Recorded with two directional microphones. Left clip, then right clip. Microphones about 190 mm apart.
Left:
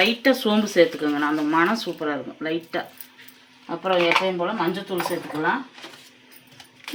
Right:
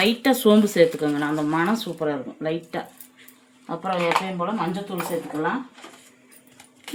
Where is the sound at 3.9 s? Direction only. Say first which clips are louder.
Left 3 dB; 20° right (ahead or behind).